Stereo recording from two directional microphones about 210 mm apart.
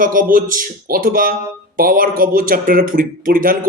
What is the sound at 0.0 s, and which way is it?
Speech, 40° right (ahead or behind).